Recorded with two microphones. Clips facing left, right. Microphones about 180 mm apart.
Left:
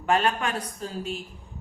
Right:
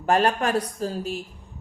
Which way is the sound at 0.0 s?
40° right (ahead or behind).